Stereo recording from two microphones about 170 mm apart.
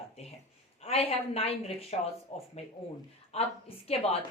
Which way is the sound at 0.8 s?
35° left (ahead or behind).